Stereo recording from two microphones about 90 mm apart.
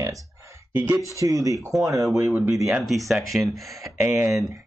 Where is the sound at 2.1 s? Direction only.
30° right (ahead or behind).